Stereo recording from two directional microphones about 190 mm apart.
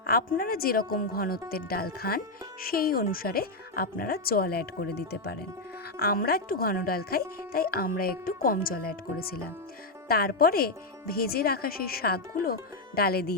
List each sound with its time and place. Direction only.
0.0 s speech: 50° left (ahead or behind)